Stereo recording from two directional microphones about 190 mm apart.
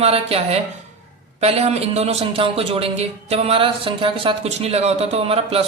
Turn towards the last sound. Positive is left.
turn(degrees=-30)  # may be behind; listen again after turning